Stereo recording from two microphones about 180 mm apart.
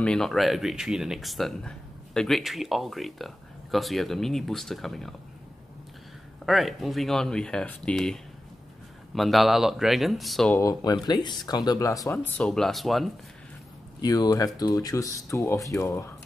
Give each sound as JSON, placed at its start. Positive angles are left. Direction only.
{"t": 0.0, "sound": "speech", "side_deg": 5}
{"t": 6.4, "sound": "speech", "side_deg": 0}
{"t": 10.5, "sound": "speech", "side_deg": 15}
{"t": 12.4, "sound": "speech", "side_deg": 5}
{"t": 14.0, "sound": "speech", "side_deg": 20}